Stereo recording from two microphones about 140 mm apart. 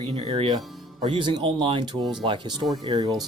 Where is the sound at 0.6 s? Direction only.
Centre (ahead or behind).